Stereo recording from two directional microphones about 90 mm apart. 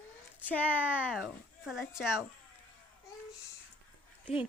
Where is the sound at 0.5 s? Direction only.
20° right (ahead or behind).